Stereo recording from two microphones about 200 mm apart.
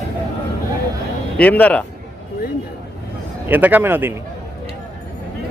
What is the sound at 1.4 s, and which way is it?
Speech, 5° left (ahead or behind).